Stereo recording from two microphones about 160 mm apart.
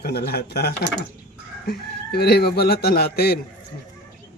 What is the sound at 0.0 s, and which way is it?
Speech, 80° left.